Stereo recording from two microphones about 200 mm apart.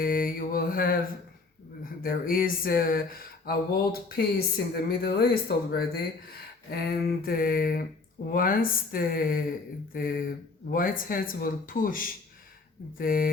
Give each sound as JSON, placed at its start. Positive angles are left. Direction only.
{"t": 0.0, "sound": "mantra", "side_deg": 45}
{"t": 1.8, "sound": "speech", "side_deg": 45}